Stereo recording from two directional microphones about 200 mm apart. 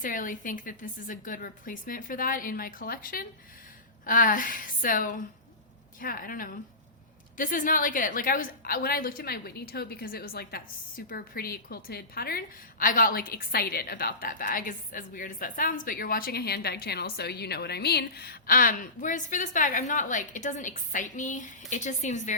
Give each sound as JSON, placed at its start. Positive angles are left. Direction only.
{"t": 0.0, "sound": "a woman's voice", "side_deg": 40}